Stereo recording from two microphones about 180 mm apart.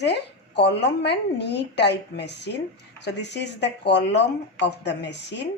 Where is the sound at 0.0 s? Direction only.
70° left (ahead or behind).